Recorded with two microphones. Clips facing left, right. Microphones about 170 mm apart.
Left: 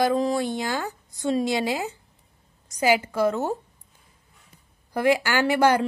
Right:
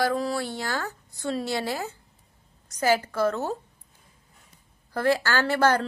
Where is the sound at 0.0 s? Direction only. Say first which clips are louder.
Left 4 dB; 20° left (ahead or behind).